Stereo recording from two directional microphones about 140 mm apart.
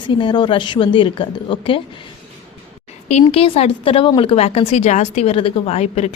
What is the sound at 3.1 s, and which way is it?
A woman's voice, 45° left (ahead or behind).